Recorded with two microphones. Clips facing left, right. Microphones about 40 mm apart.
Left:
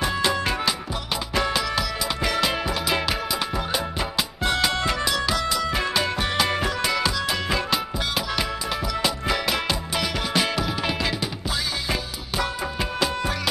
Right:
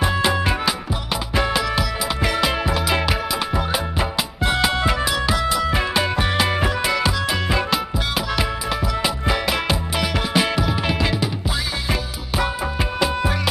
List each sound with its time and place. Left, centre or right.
0.0 s music: centre
13.0 s music: centre